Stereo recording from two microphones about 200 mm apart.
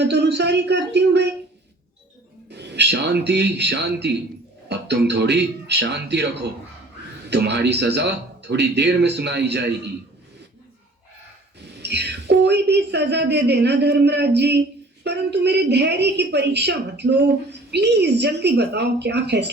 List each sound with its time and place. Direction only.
0.0 s a woman's voice: 55° right (ahead or behind)
2.5 s a woman's voice: 60° right (ahead or behind)
11.8 s a woman's voice: 55° right (ahead or behind)